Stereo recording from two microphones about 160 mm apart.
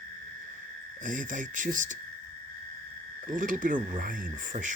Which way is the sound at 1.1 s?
55° right (ahead or behind).